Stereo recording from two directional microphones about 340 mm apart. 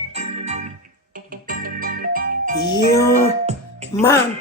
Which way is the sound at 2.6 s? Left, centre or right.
Centre.